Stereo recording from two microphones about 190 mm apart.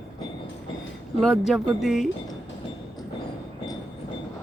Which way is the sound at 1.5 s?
Centre (ahead or behind).